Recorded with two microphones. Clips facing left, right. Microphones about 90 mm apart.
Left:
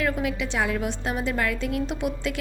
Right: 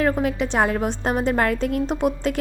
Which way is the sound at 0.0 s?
40° right (ahead or behind).